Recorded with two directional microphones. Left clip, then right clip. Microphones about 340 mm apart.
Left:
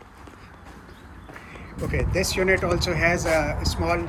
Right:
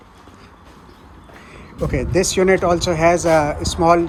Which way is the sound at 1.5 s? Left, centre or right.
Centre.